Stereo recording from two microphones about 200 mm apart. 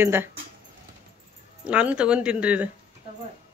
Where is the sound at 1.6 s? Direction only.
5° right (ahead or behind).